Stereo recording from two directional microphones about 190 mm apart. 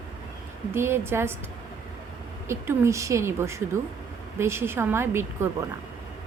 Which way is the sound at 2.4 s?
15° right (ahead or behind).